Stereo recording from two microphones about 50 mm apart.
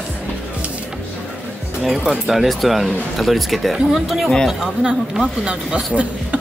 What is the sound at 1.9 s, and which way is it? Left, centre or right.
Speech, centre.